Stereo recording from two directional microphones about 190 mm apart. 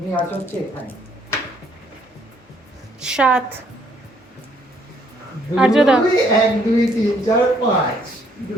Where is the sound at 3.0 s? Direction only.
5° right (ahead or behind).